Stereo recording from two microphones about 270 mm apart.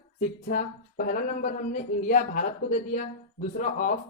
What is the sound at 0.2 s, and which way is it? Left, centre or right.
Speech, left.